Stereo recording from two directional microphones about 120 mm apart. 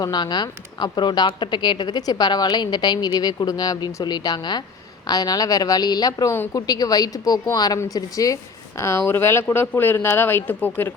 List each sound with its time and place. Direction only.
0.0 s a woman's voice: 35° left (ahead or behind); by 10.9 s 15° left (ahead or behind)